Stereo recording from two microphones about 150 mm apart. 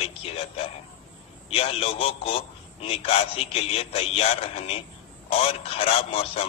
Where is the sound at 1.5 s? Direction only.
40° left (ahead or behind).